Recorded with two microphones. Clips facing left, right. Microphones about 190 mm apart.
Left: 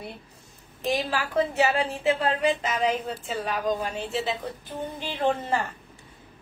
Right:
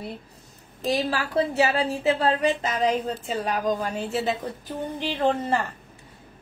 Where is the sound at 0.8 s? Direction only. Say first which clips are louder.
Right 2 dB; 35° right (ahead or behind).